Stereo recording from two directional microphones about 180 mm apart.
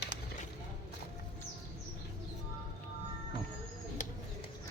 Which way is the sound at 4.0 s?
45° left (ahead or behind).